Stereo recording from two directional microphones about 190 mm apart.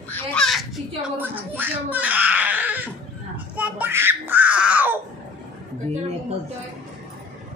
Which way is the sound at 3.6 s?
10° right (ahead or behind).